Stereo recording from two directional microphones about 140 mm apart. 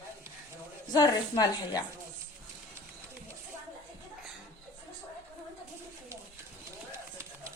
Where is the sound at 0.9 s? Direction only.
30° left (ahead or behind).